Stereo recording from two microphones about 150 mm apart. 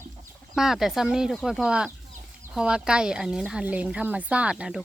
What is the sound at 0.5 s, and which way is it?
Speech, centre (ahead or behind).